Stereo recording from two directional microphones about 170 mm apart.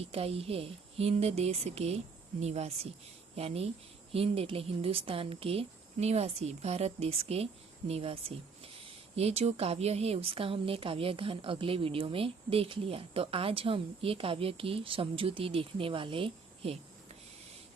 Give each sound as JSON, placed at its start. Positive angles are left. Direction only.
{"t": 0.0, "sound": "a woman's voice", "side_deg": -35}